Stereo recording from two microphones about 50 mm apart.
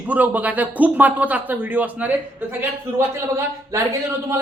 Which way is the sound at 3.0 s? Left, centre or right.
Right.